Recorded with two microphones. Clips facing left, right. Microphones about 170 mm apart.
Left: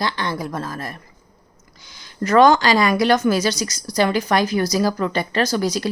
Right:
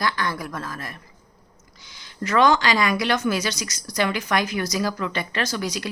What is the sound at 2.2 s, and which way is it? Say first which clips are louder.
Speech: left 5 dB; 40° left (ahead or behind).